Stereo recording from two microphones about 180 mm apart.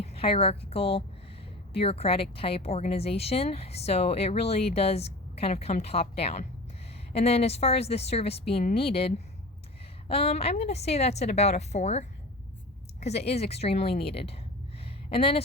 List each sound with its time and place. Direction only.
0.0 s a woman's voice: 35° left (ahead or behind)